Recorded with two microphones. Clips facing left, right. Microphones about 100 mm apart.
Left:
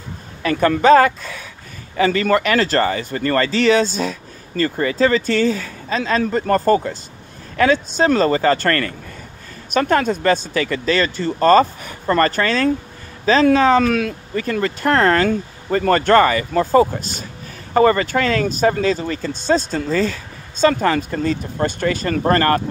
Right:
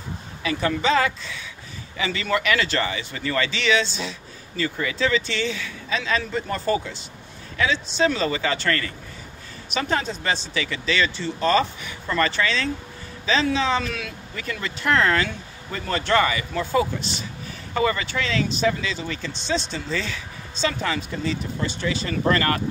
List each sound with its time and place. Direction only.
0.4 s speech: 50° left (ahead or behind)